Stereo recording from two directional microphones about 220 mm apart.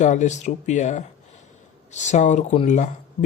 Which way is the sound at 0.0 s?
35° left (ahead or behind).